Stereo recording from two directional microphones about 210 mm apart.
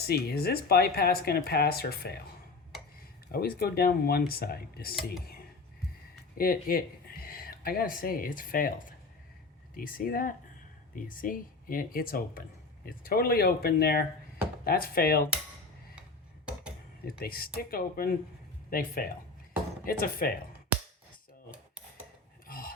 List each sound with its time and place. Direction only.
0.1 s speech: 45° left (ahead or behind)
3.3 s speech: 45° left (ahead or behind)
6.3 s speech: 45° left (ahead or behind)
9.7 s speech: 40° left (ahead or behind)
17.1 s speech: 45° left (ahead or behind)
21.5 s cutlery: 5° right (ahead or behind)
22.4 s a sound: 45° left (ahead or behind)